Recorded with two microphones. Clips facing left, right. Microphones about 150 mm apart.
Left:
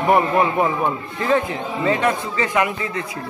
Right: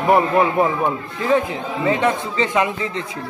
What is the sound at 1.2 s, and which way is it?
A man's voice, 15° right (ahead or behind).